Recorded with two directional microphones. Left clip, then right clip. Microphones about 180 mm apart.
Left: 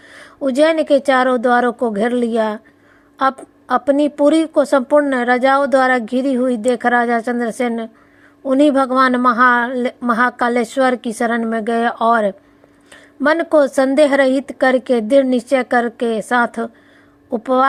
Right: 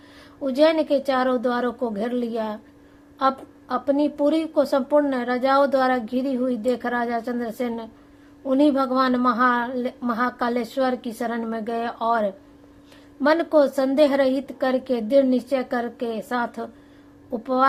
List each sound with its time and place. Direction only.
0.1 s a woman's voice: 30° left (ahead or behind)